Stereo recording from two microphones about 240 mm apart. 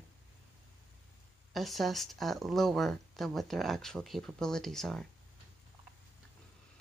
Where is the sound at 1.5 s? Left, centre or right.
Centre.